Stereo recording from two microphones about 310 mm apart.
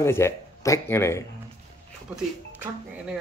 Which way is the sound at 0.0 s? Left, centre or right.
Centre.